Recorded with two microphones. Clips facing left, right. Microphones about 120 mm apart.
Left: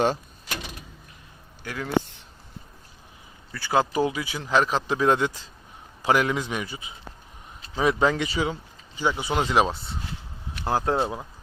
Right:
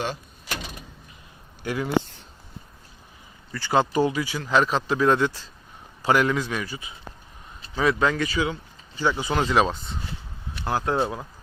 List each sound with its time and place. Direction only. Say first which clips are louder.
1.6 s speech: right 6 dB; 15° right (ahead or behind)
3.5 s speech: right 1 dB; 5° left (ahead or behind); by 8.5 s 25° left (ahead or behind)
9.0 s speech: right 1 dB; 15° left (ahead or behind)
10.7 s speech: even; 30° left (ahead or behind)